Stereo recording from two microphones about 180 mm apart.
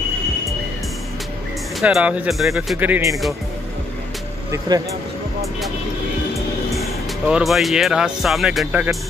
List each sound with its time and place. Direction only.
1.8 s speech: 5° right (ahead or behind)
4.5 s speech: 20° right (ahead or behind)
6.7 s speech: 5° right (ahead or behind)